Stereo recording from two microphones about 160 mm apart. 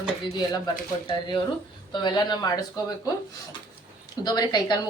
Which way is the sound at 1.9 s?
25° left (ahead or behind).